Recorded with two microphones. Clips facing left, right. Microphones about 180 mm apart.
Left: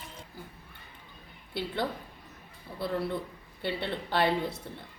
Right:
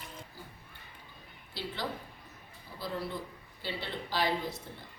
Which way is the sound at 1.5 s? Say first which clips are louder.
Left 5 dB; 55° left (ahead or behind).